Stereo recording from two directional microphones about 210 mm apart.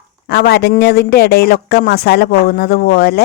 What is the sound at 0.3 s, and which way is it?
A man's voice, 50° left (ahead or behind).